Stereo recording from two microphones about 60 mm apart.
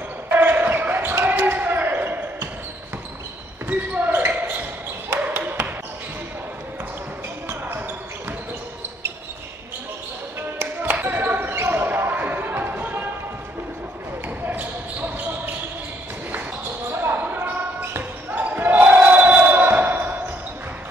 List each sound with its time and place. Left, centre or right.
0.4 s basketball bounce: right
3.6 s basketball bounce: right
5.2 s a sound: right
10.6 s basketball bounce: right
14.4 s basketball bounce: right
16.9 s basketball bounce: right